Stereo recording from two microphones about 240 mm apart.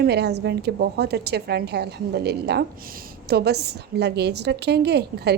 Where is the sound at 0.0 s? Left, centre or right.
Right.